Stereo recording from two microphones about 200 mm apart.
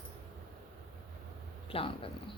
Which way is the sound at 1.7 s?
25° left (ahead or behind).